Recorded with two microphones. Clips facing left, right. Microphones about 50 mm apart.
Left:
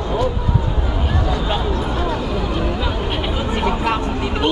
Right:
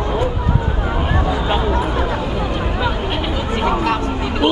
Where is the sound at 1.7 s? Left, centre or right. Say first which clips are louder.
Right 2 dB; right.